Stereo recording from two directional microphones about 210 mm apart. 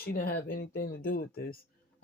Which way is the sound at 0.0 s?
45° left (ahead or behind).